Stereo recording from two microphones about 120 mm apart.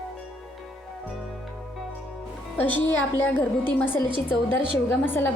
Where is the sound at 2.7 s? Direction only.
15° left (ahead or behind).